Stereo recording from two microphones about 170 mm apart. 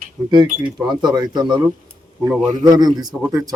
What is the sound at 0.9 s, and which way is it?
Speech, 25° right (ahead or behind).